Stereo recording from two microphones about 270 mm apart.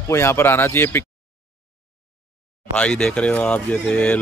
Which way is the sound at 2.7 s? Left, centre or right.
Centre.